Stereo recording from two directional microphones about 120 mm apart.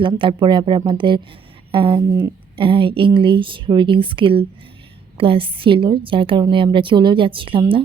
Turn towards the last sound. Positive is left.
turn(degrees=-50)  # may be behind; listen again after turning